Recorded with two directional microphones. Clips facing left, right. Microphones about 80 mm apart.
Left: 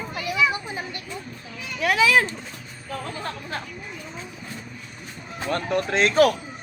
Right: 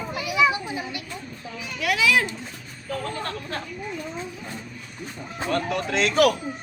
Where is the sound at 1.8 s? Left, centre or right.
Left.